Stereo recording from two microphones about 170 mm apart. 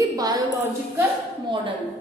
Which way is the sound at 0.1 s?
20° right (ahead or behind).